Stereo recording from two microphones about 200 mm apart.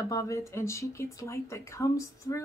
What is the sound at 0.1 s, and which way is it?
Speech, 15° left (ahead or behind).